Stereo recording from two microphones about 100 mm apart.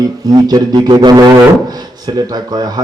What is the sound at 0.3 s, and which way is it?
A man's voice, 45° right (ahead or behind).